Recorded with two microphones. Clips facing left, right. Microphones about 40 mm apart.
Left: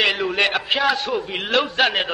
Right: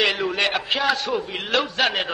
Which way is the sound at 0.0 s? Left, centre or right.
Centre.